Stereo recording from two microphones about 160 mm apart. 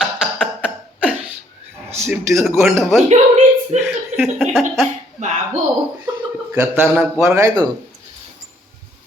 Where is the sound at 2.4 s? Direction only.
15° right (ahead or behind).